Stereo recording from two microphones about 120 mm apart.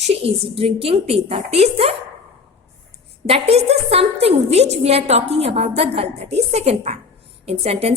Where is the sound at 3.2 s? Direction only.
55° right (ahead or behind).